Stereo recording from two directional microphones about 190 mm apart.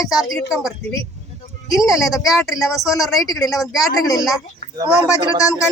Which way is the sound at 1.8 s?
Centre (ahead or behind).